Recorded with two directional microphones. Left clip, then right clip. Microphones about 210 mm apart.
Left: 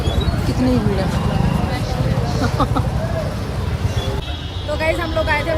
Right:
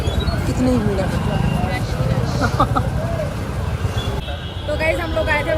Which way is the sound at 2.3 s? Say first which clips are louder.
Right 3 dB; 15° left (ahead or behind).